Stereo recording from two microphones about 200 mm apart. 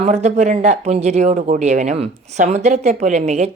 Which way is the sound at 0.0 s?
35° right (ahead or behind).